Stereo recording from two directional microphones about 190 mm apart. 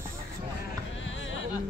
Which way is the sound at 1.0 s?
85° left.